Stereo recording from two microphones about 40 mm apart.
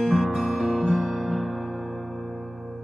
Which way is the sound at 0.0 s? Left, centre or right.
Centre.